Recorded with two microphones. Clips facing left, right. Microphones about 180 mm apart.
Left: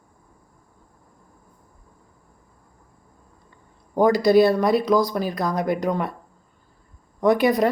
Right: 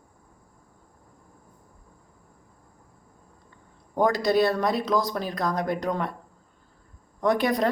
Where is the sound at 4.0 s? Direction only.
5° left (ahead or behind).